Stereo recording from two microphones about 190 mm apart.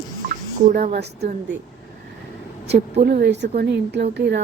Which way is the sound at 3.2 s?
65° right (ahead or behind).